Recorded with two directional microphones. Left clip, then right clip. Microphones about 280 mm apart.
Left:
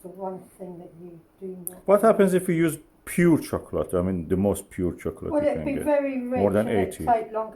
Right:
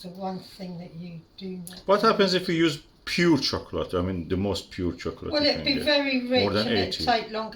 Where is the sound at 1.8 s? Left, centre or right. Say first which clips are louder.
Left 2 dB; centre.